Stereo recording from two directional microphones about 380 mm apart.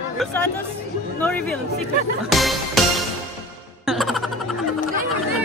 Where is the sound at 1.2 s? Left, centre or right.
Centre.